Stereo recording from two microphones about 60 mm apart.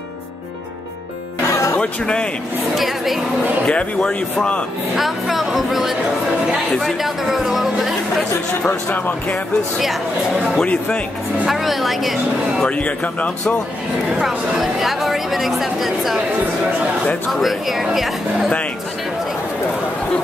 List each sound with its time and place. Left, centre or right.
1.8 s speech: centre
2.7 s speech: centre
3.6 s speech: centre
4.9 s speech: centre
8.6 s speech: centre
10.6 s speech: centre
11.4 s speech: centre
12.6 s speech: left
14.2 s speech: centre
17.3 s speech: centre